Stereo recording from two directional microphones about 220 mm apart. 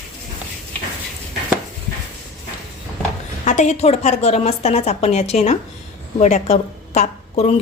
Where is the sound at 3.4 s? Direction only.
30° left (ahead or behind).